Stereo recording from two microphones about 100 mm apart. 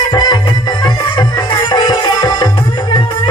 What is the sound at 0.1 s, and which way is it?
Music, 45° left (ahead or behind).